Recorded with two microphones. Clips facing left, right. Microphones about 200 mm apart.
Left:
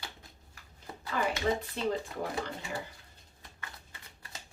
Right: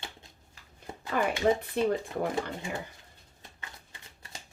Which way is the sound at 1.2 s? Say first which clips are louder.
Right 4 dB; 55° right (ahead or behind).